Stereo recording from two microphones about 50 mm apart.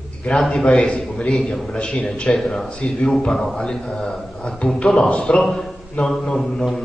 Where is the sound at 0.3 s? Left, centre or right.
Centre.